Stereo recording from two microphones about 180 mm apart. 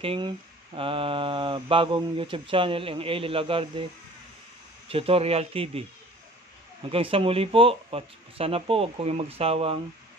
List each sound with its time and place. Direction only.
0.0 s speech: 30° right (ahead or behind)
4.8 s speech: 30° right (ahead or behind)
6.9 s speech: 30° right (ahead or behind)